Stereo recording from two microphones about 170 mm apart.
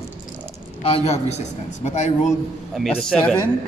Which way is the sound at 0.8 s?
35° left (ahead or behind).